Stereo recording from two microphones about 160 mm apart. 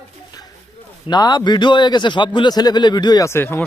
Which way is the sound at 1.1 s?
25° left (ahead or behind).